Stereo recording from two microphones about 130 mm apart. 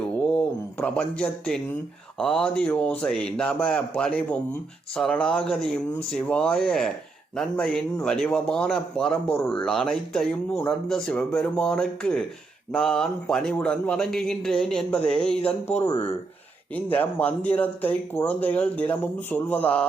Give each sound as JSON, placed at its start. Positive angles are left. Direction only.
{"t": 0.3, "sound": "speech", "side_deg": 10}
{"t": 15.8, "sound": "speech", "side_deg": 30}
{"t": 16.7, "sound": "speech", "side_deg": 10}